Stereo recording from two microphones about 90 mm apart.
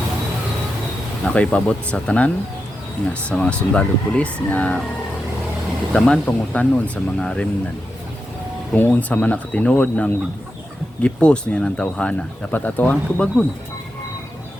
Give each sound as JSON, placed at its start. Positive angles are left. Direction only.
{"t": 1.2, "sound": "speech", "side_deg": 15}
{"t": 5.9, "sound": "speech", "side_deg": 10}
{"t": 8.7, "sound": "speech", "side_deg": 15}